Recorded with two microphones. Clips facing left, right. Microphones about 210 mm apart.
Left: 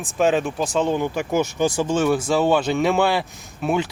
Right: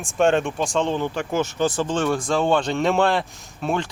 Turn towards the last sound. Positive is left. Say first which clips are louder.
# left 3 dB
turn(degrees=5)  # may be behind; listen again after turning